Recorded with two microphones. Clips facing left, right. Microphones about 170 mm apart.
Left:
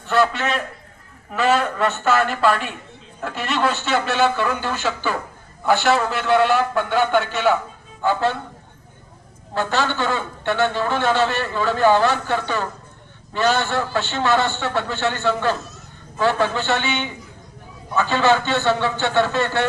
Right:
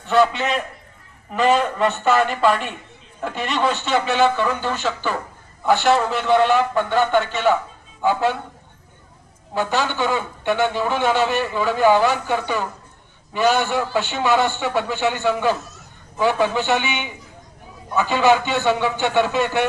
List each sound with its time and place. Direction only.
0.0 s a sound: 5° left (ahead or behind)
1.3 s a man's voice: 5° left (ahead or behind)
8.0 s a man's voice: 15° right (ahead or behind)
9.6 s a man's voice: 15° right (ahead or behind)